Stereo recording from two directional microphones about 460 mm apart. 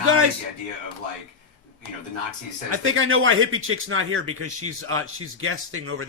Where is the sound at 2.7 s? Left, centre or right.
Right.